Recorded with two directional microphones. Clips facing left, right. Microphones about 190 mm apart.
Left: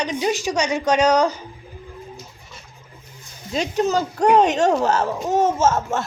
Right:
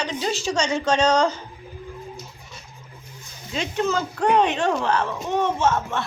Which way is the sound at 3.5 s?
40° left (ahead or behind).